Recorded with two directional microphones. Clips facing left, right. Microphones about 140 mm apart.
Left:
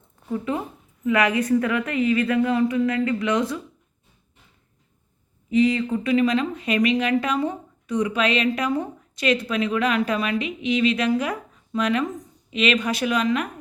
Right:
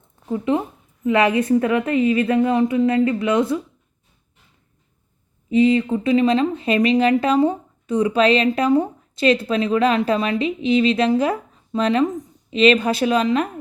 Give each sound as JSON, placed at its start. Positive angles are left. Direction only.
{"t": 0.3, "sound": "speech", "side_deg": -25}
{"t": 5.5, "sound": "speech", "side_deg": -25}